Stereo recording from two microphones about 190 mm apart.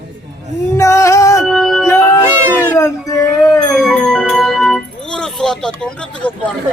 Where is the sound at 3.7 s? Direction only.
Centre (ahead or behind).